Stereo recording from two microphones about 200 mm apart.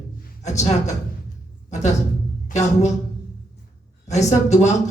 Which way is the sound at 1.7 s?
35° left (ahead or behind).